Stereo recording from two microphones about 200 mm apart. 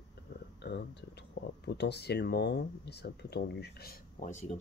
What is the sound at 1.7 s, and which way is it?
Speech, 55° left (ahead or behind).